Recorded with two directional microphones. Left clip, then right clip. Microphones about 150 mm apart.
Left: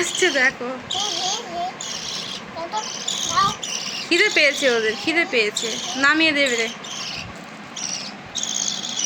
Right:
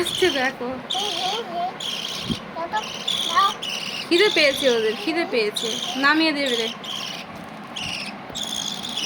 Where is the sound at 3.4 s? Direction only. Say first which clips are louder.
Even; 50° right (ahead or behind).